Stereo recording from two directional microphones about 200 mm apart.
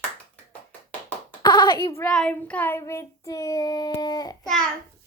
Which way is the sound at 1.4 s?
20° left (ahead or behind).